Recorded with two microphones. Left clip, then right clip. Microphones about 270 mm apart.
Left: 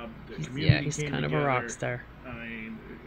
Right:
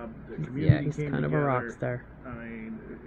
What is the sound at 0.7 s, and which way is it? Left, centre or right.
Speech, centre.